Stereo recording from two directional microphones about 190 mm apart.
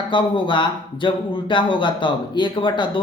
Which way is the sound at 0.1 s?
25° left (ahead or behind).